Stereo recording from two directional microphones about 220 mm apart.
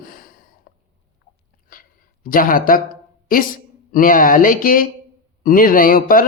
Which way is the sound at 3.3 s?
40° left (ahead or behind).